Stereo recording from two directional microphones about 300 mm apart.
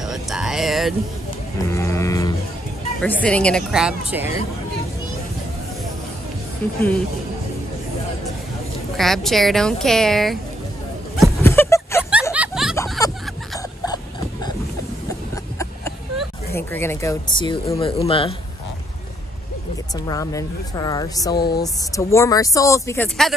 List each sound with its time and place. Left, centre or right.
0.0 s music: centre
1.7 s a woman's voice: centre
6.6 s speech: centre
8.9 s a woman's voice: centre
11.1 s a sound: centre
12.1 s snicker: centre
12.7 s vehicle: centre
16.2 s speech: centre
20.1 s speech: centre